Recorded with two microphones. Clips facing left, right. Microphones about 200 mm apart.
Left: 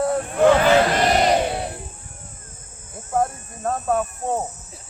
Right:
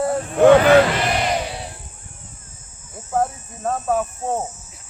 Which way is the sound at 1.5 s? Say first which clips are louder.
Left 6 dB; 55° left (ahead or behind).